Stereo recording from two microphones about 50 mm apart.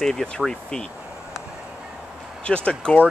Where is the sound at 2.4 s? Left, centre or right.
Left.